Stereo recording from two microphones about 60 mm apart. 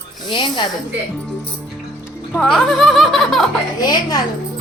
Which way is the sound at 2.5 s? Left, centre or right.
Centre.